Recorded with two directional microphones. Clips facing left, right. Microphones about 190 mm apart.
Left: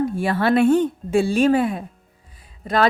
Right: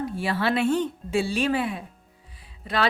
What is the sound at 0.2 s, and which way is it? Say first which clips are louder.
A woman's voice: left 6 dB; 50° left (ahead or behind).